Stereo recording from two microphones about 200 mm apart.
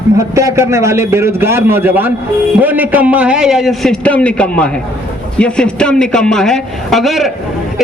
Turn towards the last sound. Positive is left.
turn(degrees=0)  # may be behind; listen again after turning